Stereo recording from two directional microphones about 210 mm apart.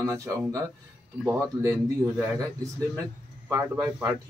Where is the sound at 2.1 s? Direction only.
15° right (ahead or behind).